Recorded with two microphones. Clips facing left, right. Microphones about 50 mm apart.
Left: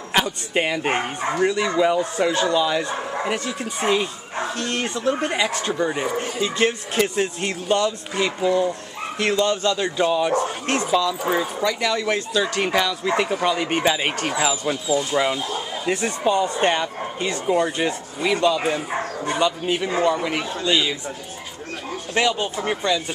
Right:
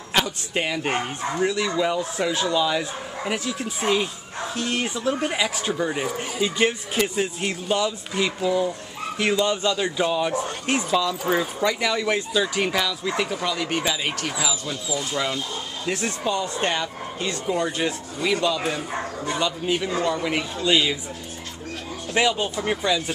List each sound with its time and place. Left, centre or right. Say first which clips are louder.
0.1 s speech: left 2 dB; centre
1.4 s speech: left 3 dB; centre
12.6 s speech: left 3 dB; centre
13.2 s speech: left 4 dB; centre
14.9 s speech: left 5 dB; centre
20.2 s speech: even; centre
22.2 s speech: even; centre
22.7 s speech: left 1 dB; centre